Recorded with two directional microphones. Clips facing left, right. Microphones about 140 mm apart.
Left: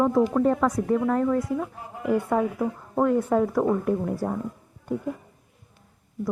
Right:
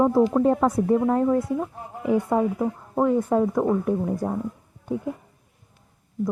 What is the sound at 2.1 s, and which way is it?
Speech, 5° right (ahead or behind).